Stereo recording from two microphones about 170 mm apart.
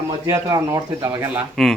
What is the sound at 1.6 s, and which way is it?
Speech, centre (ahead or behind).